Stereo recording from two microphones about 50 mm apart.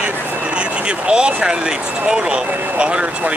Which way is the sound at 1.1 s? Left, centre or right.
Centre.